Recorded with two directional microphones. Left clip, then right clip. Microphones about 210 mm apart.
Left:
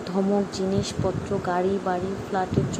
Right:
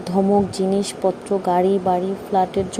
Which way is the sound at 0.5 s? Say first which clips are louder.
Right 5 dB; 20° right (ahead or behind).